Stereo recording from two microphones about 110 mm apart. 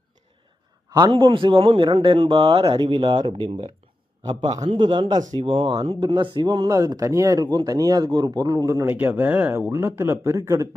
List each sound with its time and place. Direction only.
0.9 s speech: 35° right (ahead or behind)
1.2 s speech: 45° right (ahead or behind)
4.3 s speech: 35° right (ahead or behind)
5.4 s speech: 60° right (ahead or behind)
6.1 s speech: 45° right (ahead or behind); by 8.9 s 30° right (ahead or behind)
8.9 s speech: 15° right (ahead or behind)